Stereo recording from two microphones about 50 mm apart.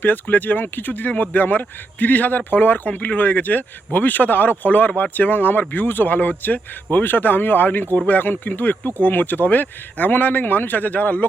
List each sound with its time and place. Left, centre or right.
0.0 s speech: left